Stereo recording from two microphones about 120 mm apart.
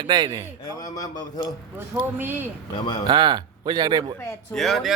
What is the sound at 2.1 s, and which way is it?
Speech, 15° right (ahead or behind).